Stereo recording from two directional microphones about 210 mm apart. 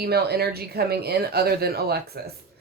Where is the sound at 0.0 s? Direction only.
50° right (ahead or behind).